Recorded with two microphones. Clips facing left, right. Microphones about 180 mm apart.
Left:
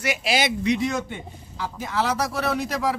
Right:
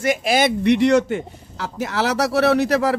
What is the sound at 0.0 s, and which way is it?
Speech, 50° right (ahead or behind).